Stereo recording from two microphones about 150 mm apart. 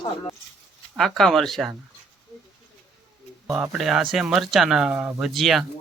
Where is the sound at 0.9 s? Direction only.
Centre (ahead or behind).